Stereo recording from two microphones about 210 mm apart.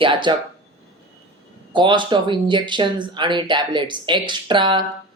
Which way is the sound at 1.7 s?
20° right (ahead or behind).